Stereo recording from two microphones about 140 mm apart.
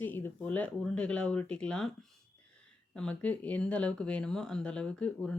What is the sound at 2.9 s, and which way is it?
Speech, 10° left (ahead or behind).